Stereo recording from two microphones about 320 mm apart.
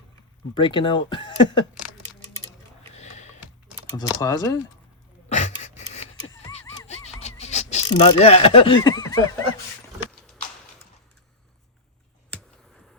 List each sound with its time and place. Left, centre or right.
0.5 s speech: centre
2.9 s sniff: left
3.9 s speech: centre
5.3 s a sound: left